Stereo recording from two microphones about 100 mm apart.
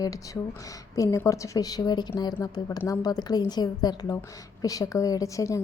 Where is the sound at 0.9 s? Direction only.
30° left (ahead or behind).